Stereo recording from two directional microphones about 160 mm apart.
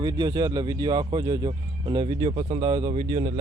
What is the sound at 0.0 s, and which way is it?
Speech, 25° right (ahead or behind).